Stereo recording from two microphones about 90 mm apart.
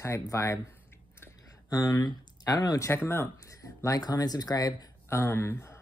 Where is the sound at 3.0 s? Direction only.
30° left (ahead or behind).